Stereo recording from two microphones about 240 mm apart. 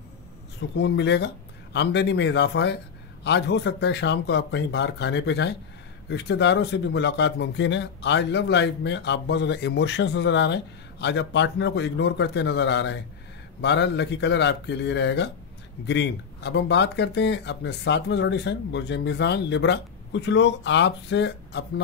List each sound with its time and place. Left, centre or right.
0.6 s a man's voice: left